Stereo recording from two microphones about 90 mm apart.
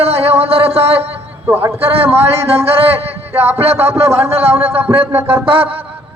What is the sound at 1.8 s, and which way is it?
Speech, 90° right.